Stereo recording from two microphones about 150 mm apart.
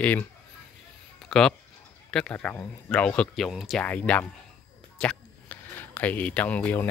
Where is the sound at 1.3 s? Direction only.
5° left (ahead or behind).